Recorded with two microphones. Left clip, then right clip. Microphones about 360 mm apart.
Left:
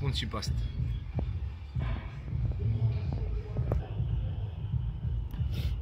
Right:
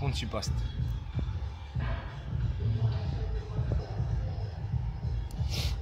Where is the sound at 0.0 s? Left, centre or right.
Centre.